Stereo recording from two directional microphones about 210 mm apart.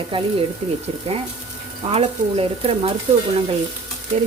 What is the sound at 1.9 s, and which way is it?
Speech, 25° right (ahead or behind).